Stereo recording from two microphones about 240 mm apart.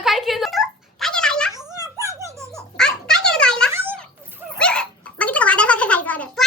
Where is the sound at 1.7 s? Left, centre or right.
Centre.